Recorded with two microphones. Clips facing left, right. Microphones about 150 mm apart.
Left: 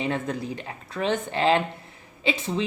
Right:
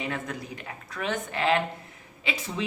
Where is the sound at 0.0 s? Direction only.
30° left (ahead or behind).